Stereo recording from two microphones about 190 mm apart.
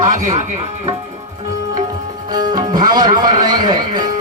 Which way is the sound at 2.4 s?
20° right (ahead or behind).